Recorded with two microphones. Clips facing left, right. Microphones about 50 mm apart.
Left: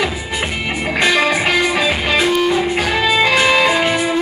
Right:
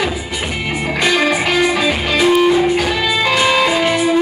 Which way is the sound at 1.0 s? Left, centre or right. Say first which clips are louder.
Even; centre.